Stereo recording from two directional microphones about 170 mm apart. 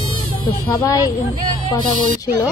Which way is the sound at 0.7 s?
20° left (ahead or behind).